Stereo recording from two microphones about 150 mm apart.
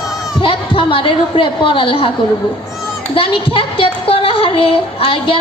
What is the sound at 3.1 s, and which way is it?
Speech, 35° left (ahead or behind).